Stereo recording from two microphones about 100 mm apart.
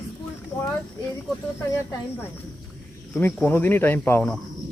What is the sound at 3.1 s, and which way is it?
Speech, 20° left (ahead or behind).